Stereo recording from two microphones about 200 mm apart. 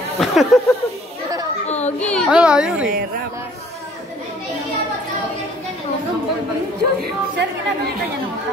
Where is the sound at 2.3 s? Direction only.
5° right (ahead or behind).